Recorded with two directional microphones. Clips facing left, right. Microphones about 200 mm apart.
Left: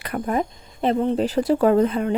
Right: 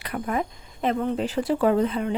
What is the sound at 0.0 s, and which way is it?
Speech, 40° left (ahead or behind).